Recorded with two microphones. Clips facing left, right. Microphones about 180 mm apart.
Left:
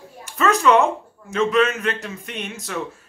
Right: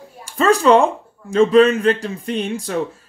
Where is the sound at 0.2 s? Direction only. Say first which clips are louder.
Right 4 dB; 30° right (ahead or behind).